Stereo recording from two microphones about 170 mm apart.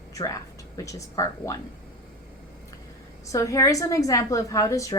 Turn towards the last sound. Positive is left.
turn(degrees=20)  # may be behind; listen again after turning